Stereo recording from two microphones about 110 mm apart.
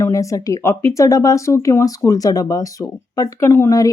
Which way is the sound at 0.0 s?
30° left (ahead or behind).